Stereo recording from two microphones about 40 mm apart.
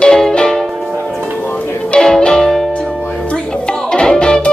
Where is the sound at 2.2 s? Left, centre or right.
Centre.